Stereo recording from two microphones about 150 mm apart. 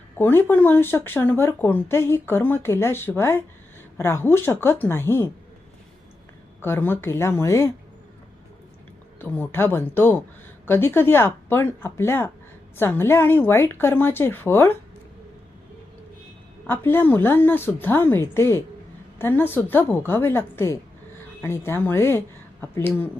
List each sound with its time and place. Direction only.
0.2 s speech: 15° left (ahead or behind)
6.6 s speech: 15° left (ahead or behind)
9.2 s speech: 10° left (ahead or behind)
16.6 s speech: 15° left (ahead or behind)